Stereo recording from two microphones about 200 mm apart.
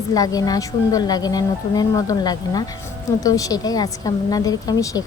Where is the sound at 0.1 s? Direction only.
20° left (ahead or behind).